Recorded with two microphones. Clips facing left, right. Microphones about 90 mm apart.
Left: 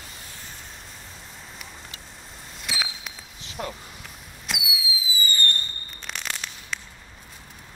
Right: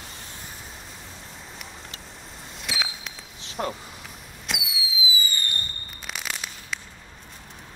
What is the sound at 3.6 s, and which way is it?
Speech, 40° right (ahead or behind).